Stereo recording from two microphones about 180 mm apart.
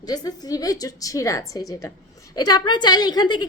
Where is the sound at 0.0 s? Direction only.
20° left (ahead or behind).